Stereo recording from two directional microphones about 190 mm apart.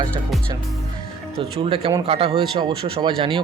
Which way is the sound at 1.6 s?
30° right (ahead or behind).